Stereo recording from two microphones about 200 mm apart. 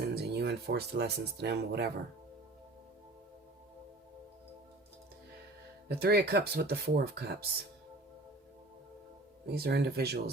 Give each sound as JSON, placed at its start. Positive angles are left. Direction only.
{"t": 0.1, "sound": "speech", "side_deg": -55}
{"t": 5.9, "sound": "speech", "side_deg": -50}
{"t": 9.5, "sound": "speech", "side_deg": -55}